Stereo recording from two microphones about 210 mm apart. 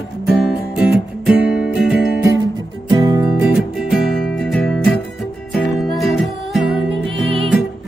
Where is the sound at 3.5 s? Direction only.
Centre (ahead or behind).